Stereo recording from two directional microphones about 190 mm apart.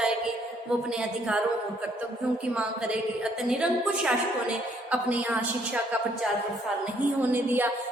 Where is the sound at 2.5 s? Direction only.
5° right (ahead or behind).